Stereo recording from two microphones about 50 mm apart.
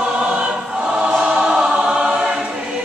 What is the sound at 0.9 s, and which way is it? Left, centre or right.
Choir, centre.